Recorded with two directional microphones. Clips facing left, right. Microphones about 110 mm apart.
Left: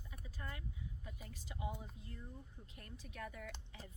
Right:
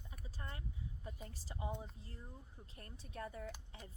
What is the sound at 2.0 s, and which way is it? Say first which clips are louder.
Speech: left 2 dB; 35° right (ahead or behind).